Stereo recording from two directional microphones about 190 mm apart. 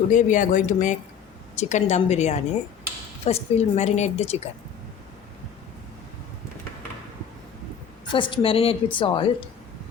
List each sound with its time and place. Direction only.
0.1 s a woman's voice: 40° left (ahead or behind)
8.1 s a woman's voice: 25° left (ahead or behind)